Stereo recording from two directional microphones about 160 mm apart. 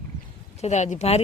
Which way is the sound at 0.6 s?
45° left (ahead or behind).